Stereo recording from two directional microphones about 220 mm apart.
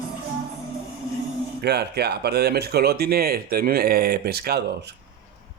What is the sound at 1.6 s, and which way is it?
Speech, 50° right (ahead or behind).